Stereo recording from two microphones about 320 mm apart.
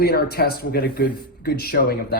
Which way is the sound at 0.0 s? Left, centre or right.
Left.